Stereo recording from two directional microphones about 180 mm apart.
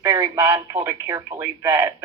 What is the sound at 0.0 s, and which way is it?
Speech, 20° right (ahead or behind).